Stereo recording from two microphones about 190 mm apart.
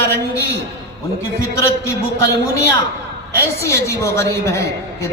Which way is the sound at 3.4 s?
15° left (ahead or behind).